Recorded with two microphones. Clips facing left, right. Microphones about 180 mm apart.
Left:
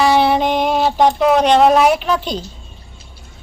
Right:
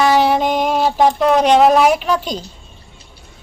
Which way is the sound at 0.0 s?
5° right (ahead or behind).